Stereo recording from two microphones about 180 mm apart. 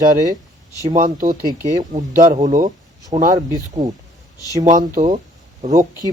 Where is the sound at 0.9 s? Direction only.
45° right (ahead or behind).